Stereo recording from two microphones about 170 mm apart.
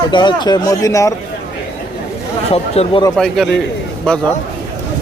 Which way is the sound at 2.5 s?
35° left (ahead or behind).